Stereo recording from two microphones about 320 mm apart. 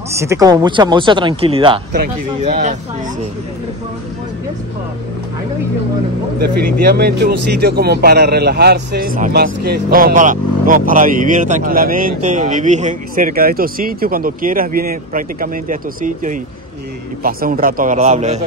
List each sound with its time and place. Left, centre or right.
0.1 s speech: centre
6.4 s a man's voice: right